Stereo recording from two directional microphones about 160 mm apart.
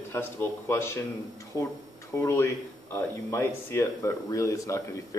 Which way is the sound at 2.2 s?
15° left (ahead or behind).